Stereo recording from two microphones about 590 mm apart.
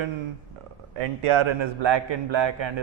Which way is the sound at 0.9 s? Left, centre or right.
Right.